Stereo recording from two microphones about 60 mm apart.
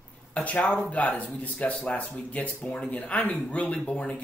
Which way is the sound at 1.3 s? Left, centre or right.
Left.